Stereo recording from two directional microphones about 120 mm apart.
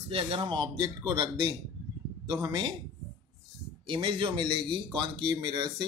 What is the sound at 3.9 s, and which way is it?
Speech, 45° right (ahead or behind).